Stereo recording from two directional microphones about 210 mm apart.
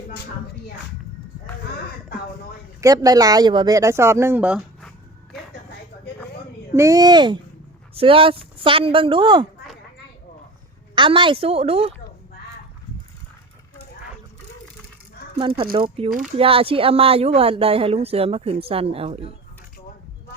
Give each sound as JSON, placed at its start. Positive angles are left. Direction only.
{"t": 2.8, "sound": "speech", "side_deg": -15}
{"t": 6.7, "sound": "speech", "side_deg": -15}
{"t": 10.9, "sound": "speech", "side_deg": -25}
{"t": 15.4, "sound": "speech", "side_deg": -25}